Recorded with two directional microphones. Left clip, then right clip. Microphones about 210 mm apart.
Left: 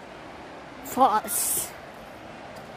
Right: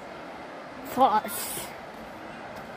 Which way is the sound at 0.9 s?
20° left (ahead or behind).